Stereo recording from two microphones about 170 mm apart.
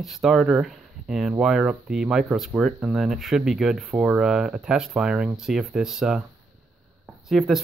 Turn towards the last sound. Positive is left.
turn(degrees=0)  # may be behind; listen again after turning